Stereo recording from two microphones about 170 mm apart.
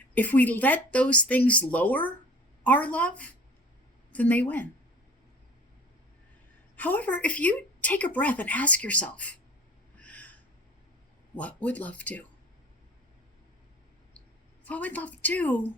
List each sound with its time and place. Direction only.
0.1 s a woman's voice: 10° left (ahead or behind)
6.7 s a woman's voice: 10° left (ahead or behind)
10.0 s owl: 10° left (ahead or behind)
11.3 s a woman's voice: 10° left (ahead or behind)
14.6 s a woman's voice: 10° left (ahead or behind)